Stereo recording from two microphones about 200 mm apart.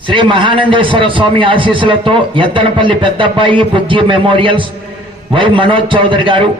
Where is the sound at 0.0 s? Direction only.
25° right (ahead or behind).